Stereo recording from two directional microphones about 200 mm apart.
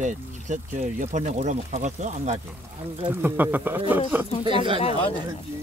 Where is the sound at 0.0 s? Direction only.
40° right (ahead or behind).